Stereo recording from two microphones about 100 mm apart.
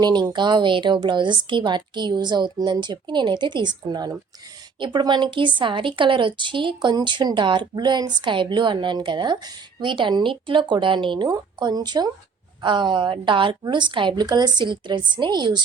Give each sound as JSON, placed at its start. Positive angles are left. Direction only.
{"t": 0.0, "sound": "a woman's voice", "side_deg": -45}